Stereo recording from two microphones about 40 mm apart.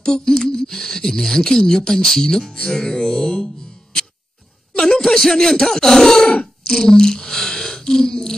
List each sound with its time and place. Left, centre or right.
0.0 s speech: centre
5.0 s speech: centre